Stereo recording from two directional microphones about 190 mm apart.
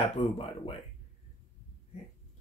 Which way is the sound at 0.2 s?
30° left (ahead or behind).